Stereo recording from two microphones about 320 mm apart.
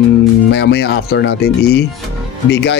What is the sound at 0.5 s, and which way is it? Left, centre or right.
Speech, left.